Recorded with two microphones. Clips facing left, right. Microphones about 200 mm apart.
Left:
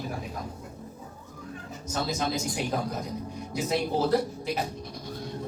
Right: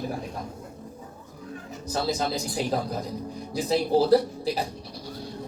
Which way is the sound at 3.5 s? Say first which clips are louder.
Right 5 dB; 35° right (ahead or behind).